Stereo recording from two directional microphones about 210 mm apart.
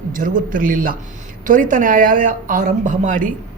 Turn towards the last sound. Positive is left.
turn(degrees=-40)  # may be behind; listen again after turning